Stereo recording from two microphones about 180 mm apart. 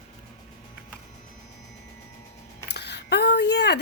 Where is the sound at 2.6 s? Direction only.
65° left (ahead or behind).